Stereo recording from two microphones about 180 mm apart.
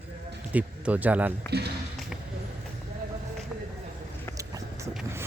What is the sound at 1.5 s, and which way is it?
Speech, 65° right (ahead or behind).